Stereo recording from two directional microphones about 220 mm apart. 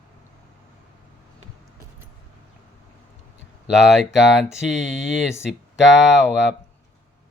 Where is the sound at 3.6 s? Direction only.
Centre (ahead or behind).